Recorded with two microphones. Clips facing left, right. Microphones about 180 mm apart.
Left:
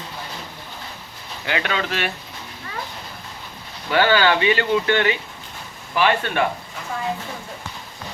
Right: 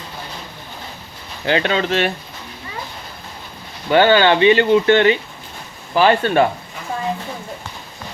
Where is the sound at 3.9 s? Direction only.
25° right (ahead or behind).